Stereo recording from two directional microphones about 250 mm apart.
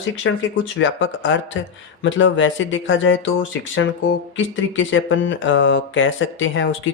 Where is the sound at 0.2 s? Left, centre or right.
Left.